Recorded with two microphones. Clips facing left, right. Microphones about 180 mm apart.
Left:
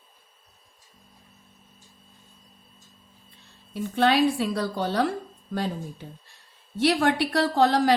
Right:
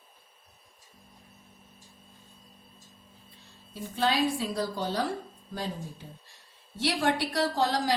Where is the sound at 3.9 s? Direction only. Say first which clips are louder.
Left 6 dB; 65° left (ahead or behind).